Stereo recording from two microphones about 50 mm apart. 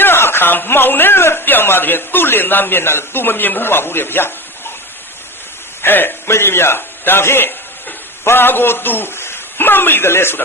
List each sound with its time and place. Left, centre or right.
0.0 s a man's voice: left
5.8 s speech: left
6.2 s a man's voice: left